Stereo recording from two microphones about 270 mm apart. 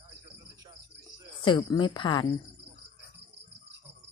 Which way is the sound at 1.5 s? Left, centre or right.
Centre.